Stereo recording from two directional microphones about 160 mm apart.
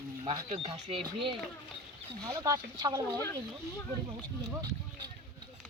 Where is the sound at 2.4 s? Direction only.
20° right (ahead or behind).